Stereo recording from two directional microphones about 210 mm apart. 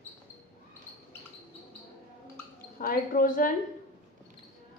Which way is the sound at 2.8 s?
40° left (ahead or behind).